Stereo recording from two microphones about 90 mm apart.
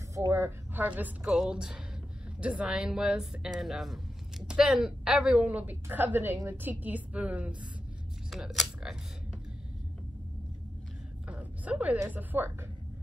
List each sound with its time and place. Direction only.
0.3 s speech: 25° right (ahead or behind)
1.2 s speech: 5° right (ahead or behind)
8.3 s speech: centre (ahead or behind)
11.2 s a sound: 15° right (ahead or behind)
12.1 s a woman's voice: 20° right (ahead or behind)